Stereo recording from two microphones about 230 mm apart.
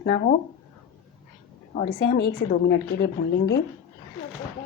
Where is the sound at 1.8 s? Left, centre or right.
Left.